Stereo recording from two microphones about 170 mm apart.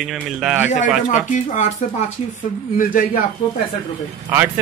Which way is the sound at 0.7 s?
45° left (ahead or behind).